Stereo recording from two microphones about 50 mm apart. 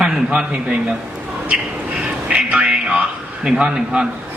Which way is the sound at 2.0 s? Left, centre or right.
Right.